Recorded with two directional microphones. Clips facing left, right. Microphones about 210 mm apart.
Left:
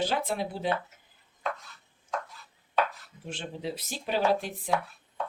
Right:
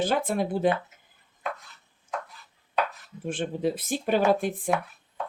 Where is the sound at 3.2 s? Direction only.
50° right (ahead or behind).